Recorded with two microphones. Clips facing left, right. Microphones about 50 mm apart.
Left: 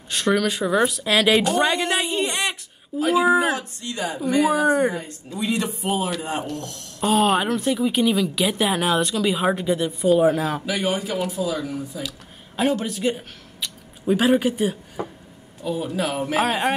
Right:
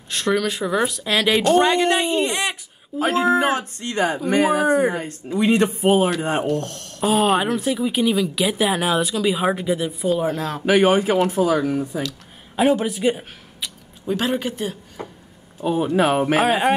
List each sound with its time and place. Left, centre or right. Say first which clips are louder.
0.1 s speech: even; centre
3.0 s speech: even; right
4.6 s speech: right 1 dB; centre
5.4 s speech: right 7 dB; right
7.0 s speech: right 1 dB; centre
10.6 s speech: right 8 dB; right
12.5 s speech: right 4 dB; centre
14.0 s speech: left 4 dB; centre
15.6 s speech: right 6 dB; right
16.3 s speech: even; centre